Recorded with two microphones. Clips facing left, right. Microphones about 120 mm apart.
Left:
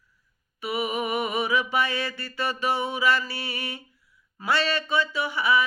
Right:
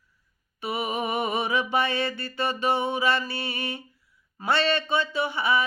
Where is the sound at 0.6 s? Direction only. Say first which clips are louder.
Left 1 dB; 25° right (ahead or behind).